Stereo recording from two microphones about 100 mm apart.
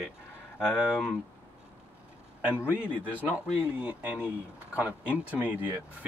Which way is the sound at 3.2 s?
10° right (ahead or behind).